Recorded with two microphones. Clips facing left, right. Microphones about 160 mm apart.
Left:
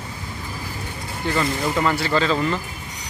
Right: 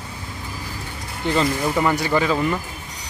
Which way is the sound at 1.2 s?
20° right (ahead or behind).